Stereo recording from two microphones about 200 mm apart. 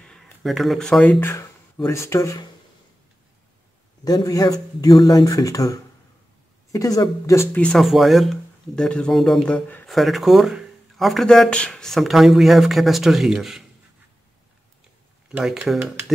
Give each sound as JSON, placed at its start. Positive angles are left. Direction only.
{"t": 0.0, "sound": "speech", "side_deg": 0}
{"t": 4.0, "sound": "speech", "side_deg": 20}
{"t": 15.3, "sound": "speech", "side_deg": -5}